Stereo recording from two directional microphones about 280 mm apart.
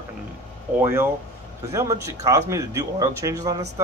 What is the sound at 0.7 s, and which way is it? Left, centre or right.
A man's voice, centre.